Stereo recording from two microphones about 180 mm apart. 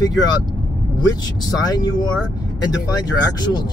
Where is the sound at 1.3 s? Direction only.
20° left (ahead or behind).